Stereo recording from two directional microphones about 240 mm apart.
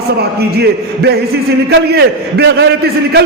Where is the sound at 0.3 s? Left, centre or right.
Right.